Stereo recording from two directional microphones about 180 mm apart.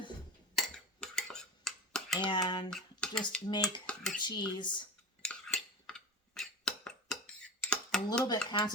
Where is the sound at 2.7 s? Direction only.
5° left (ahead or behind).